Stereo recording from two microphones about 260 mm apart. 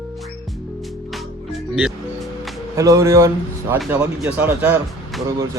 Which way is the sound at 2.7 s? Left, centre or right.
Centre.